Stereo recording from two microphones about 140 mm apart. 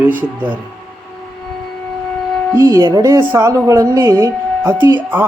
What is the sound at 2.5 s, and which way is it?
Speech, 20° right (ahead or behind).